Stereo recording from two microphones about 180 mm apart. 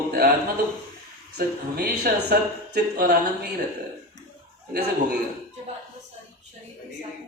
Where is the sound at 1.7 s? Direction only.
65° right (ahead or behind).